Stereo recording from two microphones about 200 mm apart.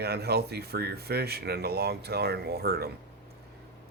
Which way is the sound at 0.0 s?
55° right (ahead or behind).